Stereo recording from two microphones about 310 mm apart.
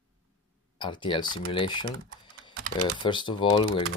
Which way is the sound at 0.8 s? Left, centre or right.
Centre.